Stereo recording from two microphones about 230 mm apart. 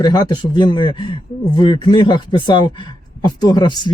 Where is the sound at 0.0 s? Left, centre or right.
Centre.